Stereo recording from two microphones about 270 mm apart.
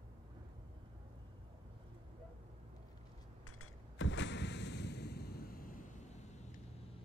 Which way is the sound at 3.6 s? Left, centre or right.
Left.